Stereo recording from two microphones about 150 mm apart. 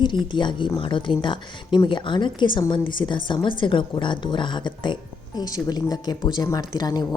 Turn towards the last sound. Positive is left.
turn(degrees=25)  # may be behind; listen again after turning